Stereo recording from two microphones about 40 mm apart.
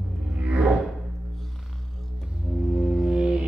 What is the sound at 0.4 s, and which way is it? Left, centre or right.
Music, right.